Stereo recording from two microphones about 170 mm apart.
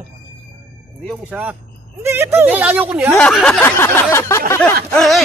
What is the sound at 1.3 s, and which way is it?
Speech, 10° right (ahead or behind).